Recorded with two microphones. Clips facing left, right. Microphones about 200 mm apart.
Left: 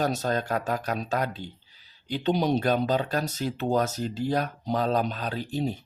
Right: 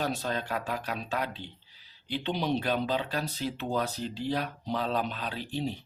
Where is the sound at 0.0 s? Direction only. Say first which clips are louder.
Left 5 dB; 45° left (ahead or behind).